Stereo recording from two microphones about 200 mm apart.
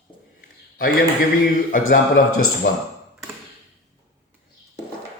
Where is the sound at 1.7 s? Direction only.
45° left (ahead or behind).